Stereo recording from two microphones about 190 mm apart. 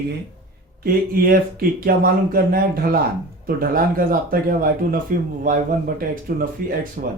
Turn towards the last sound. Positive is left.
turn(degrees=-45)  # may be behind; listen again after turning